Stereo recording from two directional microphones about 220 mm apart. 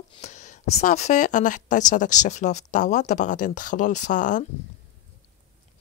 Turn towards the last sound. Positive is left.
turn(degrees=35)  # may be behind; listen again after turning